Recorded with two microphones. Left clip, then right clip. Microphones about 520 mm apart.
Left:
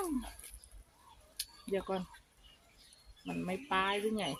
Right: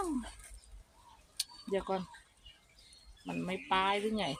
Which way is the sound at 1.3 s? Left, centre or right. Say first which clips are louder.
Right 2 dB; left.